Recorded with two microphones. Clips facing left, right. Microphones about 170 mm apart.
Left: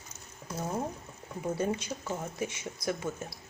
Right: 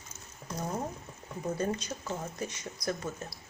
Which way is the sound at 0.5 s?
5° left (ahead or behind).